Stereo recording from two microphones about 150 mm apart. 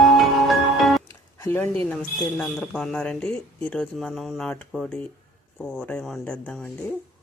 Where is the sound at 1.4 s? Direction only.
15° left (ahead or behind).